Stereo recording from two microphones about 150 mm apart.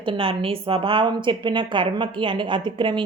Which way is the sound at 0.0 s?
35° right (ahead or behind).